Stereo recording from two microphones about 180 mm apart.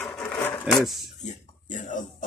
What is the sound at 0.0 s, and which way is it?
Wood, 5° left (ahead or behind).